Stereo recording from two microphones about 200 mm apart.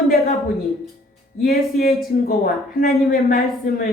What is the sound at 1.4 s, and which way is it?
A woman's voice, 45° left (ahead or behind).